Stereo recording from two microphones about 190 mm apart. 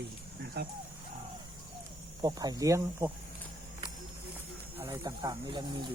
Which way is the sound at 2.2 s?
20° right (ahead or behind).